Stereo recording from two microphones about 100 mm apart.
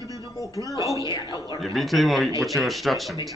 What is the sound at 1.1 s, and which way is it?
Speech, 45° left (ahead or behind).